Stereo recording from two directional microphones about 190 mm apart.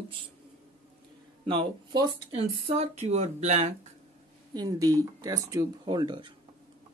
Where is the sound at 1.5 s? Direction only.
25° right (ahead or behind).